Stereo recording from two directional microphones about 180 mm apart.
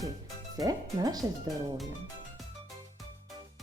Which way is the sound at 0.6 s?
20° right (ahead or behind).